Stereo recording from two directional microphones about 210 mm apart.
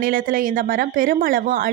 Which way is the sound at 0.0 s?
40° right (ahead or behind).